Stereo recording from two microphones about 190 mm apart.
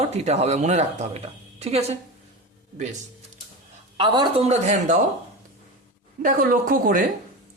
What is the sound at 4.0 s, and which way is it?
Speech, 25° right (ahead or behind).